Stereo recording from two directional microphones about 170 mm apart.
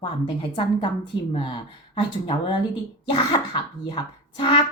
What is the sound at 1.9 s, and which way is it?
A woman's voice, 30° left (ahead or behind).